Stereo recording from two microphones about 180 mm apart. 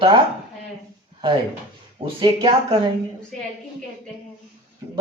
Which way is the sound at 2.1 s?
30° right (ahead or behind).